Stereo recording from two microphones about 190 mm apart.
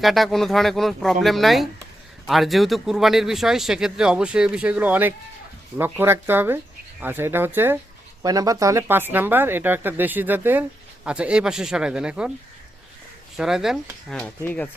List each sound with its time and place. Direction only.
0.0 s a man's voice: centre (ahead or behind)
13.3 s a man's voice: centre (ahead or behind)